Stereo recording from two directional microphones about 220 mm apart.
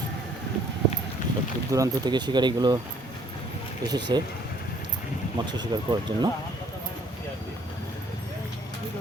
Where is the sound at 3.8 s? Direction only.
15° right (ahead or behind).